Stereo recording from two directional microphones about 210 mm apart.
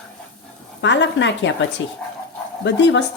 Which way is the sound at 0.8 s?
60° left (ahead or behind).